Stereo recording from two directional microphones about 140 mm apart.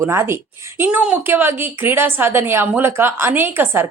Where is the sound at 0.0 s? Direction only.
20° right (ahead or behind).